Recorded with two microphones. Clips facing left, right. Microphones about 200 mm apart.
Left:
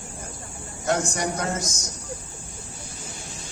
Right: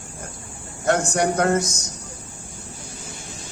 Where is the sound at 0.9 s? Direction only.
60° right (ahead or behind).